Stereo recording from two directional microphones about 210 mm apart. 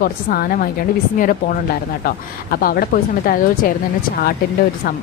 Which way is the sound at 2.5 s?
45° left (ahead or behind).